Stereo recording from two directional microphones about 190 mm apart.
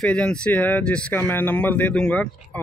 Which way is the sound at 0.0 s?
5° left (ahead or behind).